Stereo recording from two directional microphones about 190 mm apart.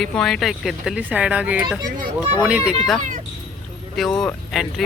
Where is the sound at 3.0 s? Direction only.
40° right (ahead or behind).